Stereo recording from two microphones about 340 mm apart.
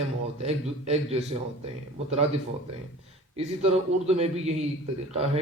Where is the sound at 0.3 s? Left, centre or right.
Centre.